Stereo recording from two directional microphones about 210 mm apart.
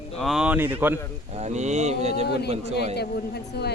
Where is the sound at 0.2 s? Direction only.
Centre (ahead or behind).